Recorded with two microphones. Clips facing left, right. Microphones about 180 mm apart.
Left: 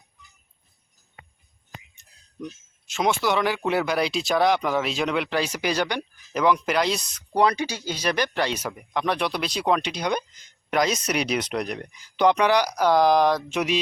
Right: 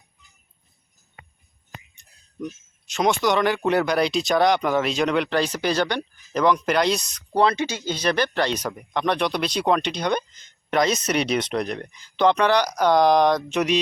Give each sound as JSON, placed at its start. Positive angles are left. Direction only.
{"t": 2.8, "sound": "speech", "side_deg": 0}
{"t": 7.3, "sound": "speech", "side_deg": 15}